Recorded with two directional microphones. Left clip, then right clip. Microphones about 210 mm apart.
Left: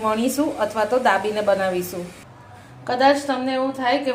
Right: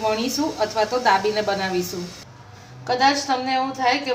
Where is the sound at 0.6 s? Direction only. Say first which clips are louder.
Right 1 dB; 20° left (ahead or behind).